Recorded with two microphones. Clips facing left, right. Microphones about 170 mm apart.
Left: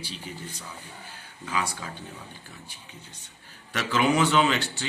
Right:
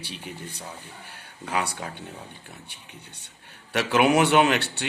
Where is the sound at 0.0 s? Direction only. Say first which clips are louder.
Right 1 dB; 65° right (ahead or behind).